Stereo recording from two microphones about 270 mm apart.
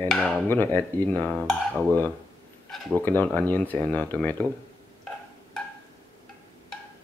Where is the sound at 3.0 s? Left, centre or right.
Centre.